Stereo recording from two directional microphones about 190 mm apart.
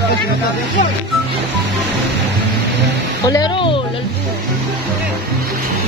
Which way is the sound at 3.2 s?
20° left (ahead or behind).